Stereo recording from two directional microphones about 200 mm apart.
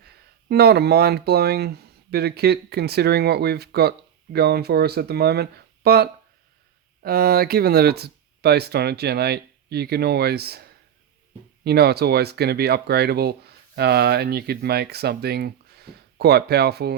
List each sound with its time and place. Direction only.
0.4 s speech: 55° right (ahead or behind)
11.6 s speech: 55° right (ahead or behind)